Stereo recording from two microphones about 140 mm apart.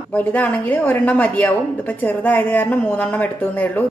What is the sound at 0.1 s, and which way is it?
A woman's voice, 10° left (ahead or behind).